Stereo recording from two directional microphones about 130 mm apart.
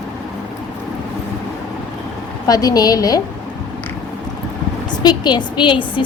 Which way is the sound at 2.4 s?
30° left (ahead or behind).